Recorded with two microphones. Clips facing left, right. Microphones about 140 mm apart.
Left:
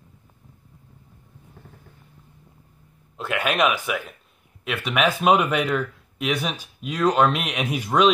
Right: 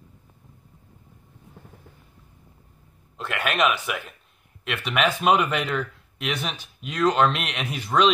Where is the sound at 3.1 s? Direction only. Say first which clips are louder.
Left 2 dB; 5° left (ahead or behind).